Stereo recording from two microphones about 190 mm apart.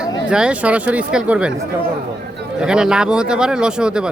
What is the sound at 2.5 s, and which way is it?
Speech, 5° right (ahead or behind).